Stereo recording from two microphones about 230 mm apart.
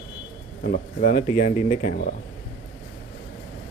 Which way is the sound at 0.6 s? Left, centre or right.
Left.